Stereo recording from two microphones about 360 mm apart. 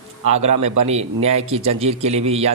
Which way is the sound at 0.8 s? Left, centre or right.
Centre.